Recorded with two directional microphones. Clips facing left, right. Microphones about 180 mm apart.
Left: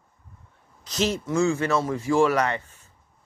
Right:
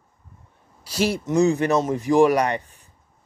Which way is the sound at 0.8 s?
10° right (ahead or behind).